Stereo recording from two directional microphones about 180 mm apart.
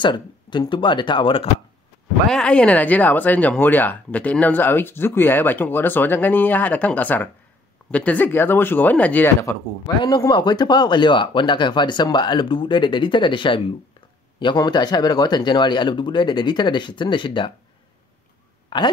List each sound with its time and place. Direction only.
0.0 s speech: 25° left (ahead or behind)
2.2 s speech: 5° left (ahead or behind)
10.0 s speech: 25° left (ahead or behind)
18.7 s speech: 25° left (ahead or behind)